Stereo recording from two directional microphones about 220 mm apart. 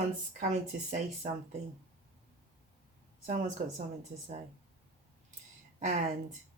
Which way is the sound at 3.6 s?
35° right (ahead or behind).